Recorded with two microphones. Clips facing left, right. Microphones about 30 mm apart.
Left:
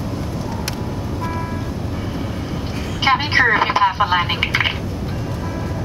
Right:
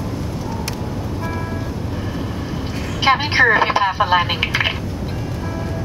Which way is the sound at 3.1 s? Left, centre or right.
Centre.